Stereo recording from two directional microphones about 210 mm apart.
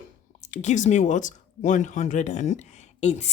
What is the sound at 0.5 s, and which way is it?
A woman's voice, 35° left (ahead or behind).